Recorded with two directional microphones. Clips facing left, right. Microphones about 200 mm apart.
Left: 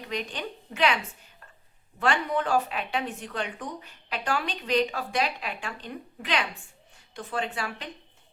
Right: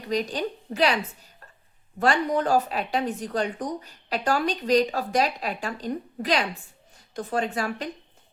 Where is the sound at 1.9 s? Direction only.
40° right (ahead or behind).